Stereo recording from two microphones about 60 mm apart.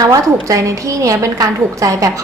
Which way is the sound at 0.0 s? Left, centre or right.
Right.